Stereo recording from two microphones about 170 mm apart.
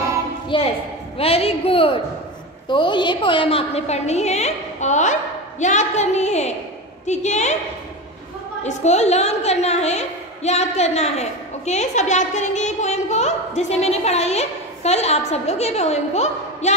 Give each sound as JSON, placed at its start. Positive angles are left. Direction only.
{"t": 0.5, "sound": "a woman's voice", "side_deg": 30}
{"t": 8.6, "sound": "a woman's voice", "side_deg": 40}